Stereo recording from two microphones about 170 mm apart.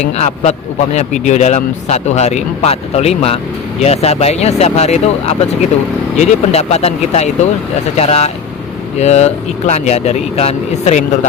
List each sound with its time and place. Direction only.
0.0 s speech: 40° left (ahead or behind)